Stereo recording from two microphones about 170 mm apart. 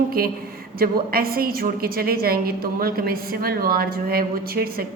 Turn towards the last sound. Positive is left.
turn(degrees=-60)  # may be behind; listen again after turning